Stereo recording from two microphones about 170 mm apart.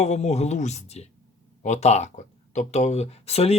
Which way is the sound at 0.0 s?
40° left (ahead or behind).